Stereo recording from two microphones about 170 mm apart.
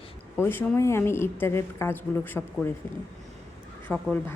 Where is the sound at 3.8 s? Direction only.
10° left (ahead or behind).